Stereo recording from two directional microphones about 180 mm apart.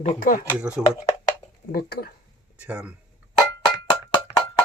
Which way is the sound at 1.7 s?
55° left (ahead or behind).